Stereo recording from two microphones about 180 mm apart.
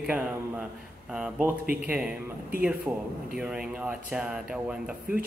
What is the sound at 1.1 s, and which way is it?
Speech, 5° right (ahead or behind).